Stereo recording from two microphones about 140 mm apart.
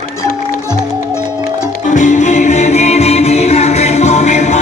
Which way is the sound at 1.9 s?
60° left (ahead or behind).